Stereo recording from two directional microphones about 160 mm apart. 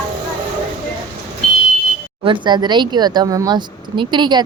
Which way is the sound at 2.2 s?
30° right (ahead or behind).